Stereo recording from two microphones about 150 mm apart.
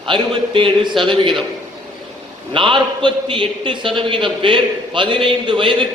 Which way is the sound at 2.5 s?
35° right (ahead or behind).